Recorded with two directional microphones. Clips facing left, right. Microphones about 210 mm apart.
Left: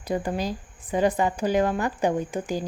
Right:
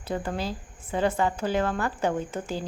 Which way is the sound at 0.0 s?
15° left (ahead or behind).